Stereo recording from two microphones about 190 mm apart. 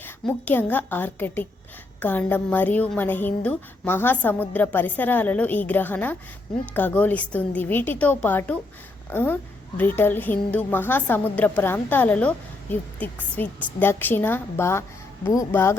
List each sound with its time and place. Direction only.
0.0 s a woman's voice: 10° left (ahead or behind)
13.3 s a woman's voice: 10° left (ahead or behind)